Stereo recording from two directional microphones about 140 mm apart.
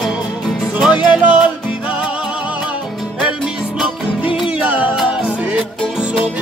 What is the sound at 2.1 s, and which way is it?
Music, 10° right (ahead or behind).